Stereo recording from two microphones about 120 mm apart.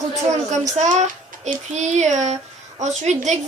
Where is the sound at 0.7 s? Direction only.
75° right (ahead or behind).